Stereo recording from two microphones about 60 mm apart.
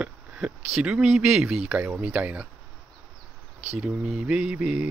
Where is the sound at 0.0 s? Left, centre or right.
Centre.